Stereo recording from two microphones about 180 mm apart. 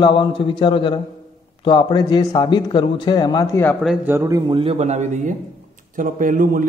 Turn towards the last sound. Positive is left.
turn(degrees=-45)  # may be behind; listen again after turning